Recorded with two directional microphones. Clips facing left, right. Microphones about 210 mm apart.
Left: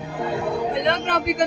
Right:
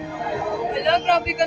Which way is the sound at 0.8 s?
55° left (ahead or behind).